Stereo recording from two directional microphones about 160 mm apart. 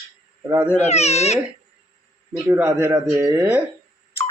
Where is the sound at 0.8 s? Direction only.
45° left (ahead or behind).